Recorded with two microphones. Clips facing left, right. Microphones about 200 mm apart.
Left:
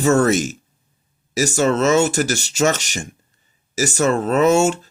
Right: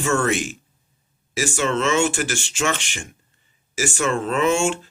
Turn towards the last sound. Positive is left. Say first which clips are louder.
# left 5 dB
turn(degrees=40)  # may be behind; listen again after turning